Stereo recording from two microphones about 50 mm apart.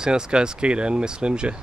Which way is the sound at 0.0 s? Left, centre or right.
Centre.